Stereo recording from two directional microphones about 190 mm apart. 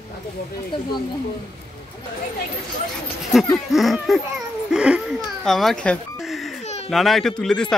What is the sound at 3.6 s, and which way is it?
A man's voice, centre (ahead or behind).